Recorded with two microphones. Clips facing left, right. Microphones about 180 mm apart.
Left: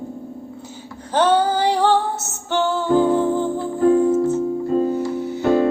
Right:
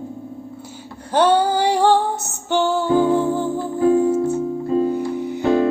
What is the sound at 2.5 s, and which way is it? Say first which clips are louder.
Music: even; 10° right (ahead or behind).